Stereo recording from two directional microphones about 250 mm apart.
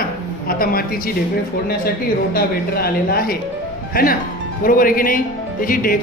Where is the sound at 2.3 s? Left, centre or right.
Left.